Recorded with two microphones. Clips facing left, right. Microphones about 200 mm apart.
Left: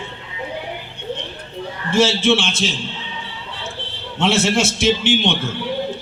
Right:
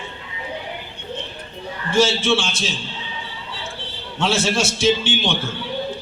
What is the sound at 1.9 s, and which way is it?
Speech, 25° left (ahead or behind).